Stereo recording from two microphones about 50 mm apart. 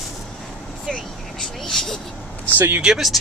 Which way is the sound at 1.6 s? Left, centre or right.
Centre.